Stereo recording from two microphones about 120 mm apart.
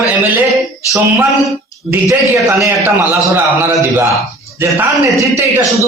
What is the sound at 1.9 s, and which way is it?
A man's voice, 20° right (ahead or behind).